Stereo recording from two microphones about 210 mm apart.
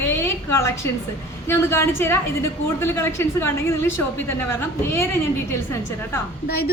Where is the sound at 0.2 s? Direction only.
15° left (ahead or behind).